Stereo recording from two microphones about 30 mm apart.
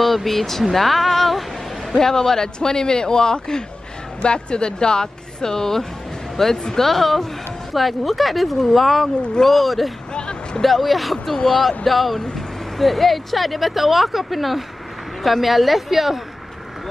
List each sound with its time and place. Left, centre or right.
0.0 s speech: centre
2.0 s a man's voice: centre
6.6 s a man's voice: centre
6.9 s speech: centre
10.1 s a sound: left
10.6 s speech: centre